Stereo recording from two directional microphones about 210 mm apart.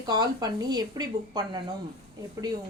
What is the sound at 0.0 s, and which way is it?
Speech, 20° right (ahead or behind).